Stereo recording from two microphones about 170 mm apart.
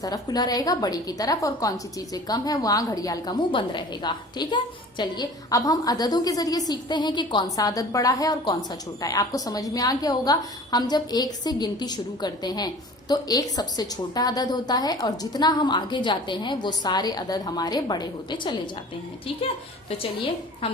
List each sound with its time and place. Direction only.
0.0 s a woman's voice: 25° left (ahead or behind)